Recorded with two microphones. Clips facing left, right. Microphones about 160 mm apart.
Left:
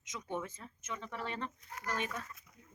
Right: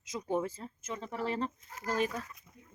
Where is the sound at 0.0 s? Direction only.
35° right (ahead or behind).